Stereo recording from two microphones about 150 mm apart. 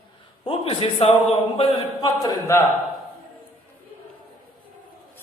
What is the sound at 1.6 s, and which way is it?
A man's voice, 30° left (ahead or behind).